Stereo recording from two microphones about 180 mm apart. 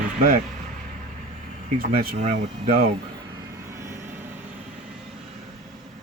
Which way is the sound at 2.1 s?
40° right (ahead or behind).